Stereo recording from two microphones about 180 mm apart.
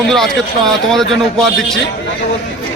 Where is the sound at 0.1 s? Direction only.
Centre (ahead or behind).